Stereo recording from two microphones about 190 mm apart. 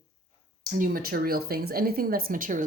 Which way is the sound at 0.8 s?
50° right (ahead or behind).